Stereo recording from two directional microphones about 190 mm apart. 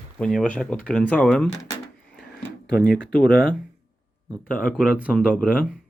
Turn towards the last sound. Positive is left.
turn(degrees=10)  # may be behind; listen again after turning